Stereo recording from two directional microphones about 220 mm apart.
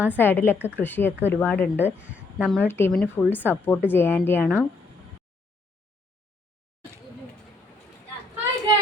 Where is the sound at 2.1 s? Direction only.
5° right (ahead or behind).